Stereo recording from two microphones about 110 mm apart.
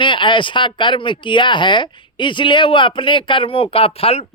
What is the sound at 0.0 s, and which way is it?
Speech, 50° left (ahead or behind).